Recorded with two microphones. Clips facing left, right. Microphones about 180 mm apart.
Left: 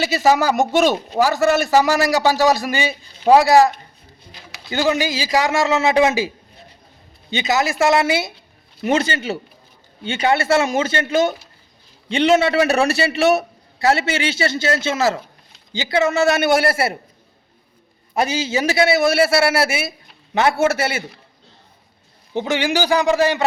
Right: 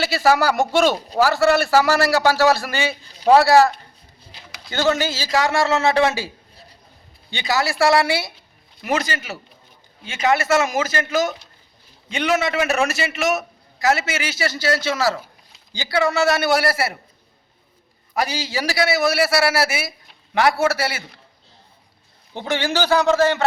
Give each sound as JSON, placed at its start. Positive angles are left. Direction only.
{"t": 0.0, "sound": "a man's voice", "side_deg": 15}
{"t": 4.7, "sound": "a man's voice", "side_deg": 15}
{"t": 18.1, "sound": "a man's voice", "side_deg": 25}
{"t": 22.4, "sound": "a man's voice", "side_deg": 15}